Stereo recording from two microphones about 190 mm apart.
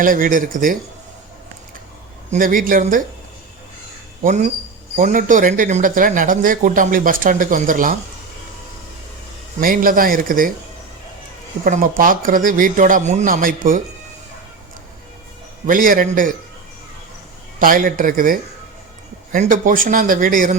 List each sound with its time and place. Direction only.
0.0 s speech: 45° right (ahead or behind)
2.3 s speech: 45° right (ahead or behind)
4.2 s speech: 40° right (ahead or behind)
9.6 s speech: 45° right (ahead or behind)
11.6 s speech: 45° right (ahead or behind)
15.6 s speech: 45° right (ahead or behind)
17.6 s speech: 45° right (ahead or behind)